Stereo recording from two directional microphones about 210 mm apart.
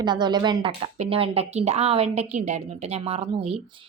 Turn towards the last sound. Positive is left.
turn(degrees=-25)  # may be behind; listen again after turning